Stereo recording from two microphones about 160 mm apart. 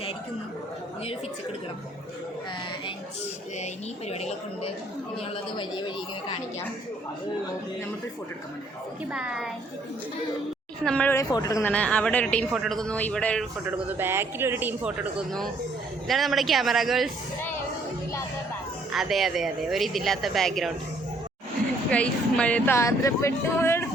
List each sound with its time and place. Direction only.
4.1 s a woman's voice: 40° left (ahead or behind)
9.1 s speech: 5° right (ahead or behind)
10.8 s speech: 10° left (ahead or behind)
11.7 s speech: 10° left (ahead or behind)
13.7 s a man's voice: 10° right (ahead or behind)
18.9 s speech: centre (ahead or behind)
21.8 s speech: 5° left (ahead or behind)